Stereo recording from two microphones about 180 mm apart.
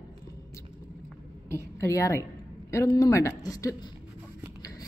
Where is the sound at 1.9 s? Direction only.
15° left (ahead or behind).